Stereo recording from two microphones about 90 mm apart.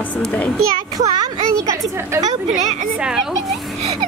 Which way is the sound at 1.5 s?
40° right (ahead or behind).